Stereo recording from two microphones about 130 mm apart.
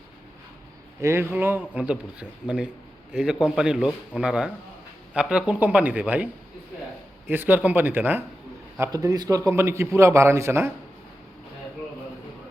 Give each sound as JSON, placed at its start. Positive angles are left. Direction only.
{"t": 1.0, "sound": "a man's voice", "side_deg": -20}
{"t": 7.3, "sound": "a man's voice", "side_deg": -15}
{"t": 8.8, "sound": "a man's voice", "side_deg": -25}